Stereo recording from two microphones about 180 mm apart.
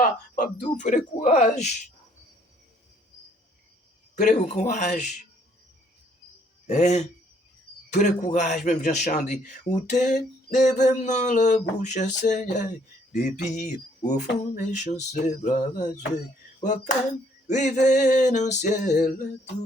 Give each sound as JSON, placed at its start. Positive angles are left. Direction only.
{"t": 0.0, "sound": "a man's voice", "side_deg": 45}
{"t": 4.1, "sound": "speech", "side_deg": 40}
{"t": 6.7, "sound": "a man's voice", "side_deg": 40}
{"t": 16.6, "sound": "a sound", "side_deg": 45}
{"t": 17.5, "sound": "a man's voice", "side_deg": 40}